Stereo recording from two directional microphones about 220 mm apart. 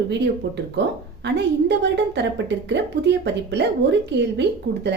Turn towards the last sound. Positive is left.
turn(degrees=-50)  # may be behind; listen again after turning